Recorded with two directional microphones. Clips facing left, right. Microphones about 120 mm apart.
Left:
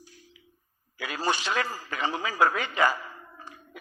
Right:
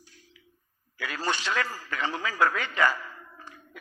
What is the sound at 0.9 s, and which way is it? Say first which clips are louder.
A man's voice: left 2 dB; 15° left (ahead or behind).